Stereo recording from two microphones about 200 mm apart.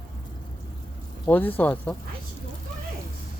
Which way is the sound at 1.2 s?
10° left (ahead or behind).